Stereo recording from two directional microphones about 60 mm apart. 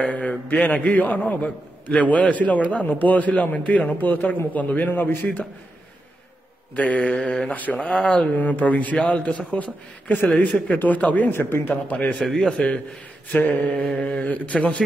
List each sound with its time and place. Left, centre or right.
0.0 s a man's voice: left
6.7 s a man's voice: left
7.5 s a man's voice: left
11.7 s a man's voice: left
12.2 s a man's voice: centre; by 13.8 s left
13.8 s a man's voice: centre
14.2 s a man's voice: left